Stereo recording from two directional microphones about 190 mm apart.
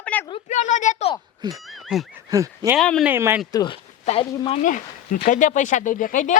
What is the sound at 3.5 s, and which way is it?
Speech, 20° left (ahead or behind).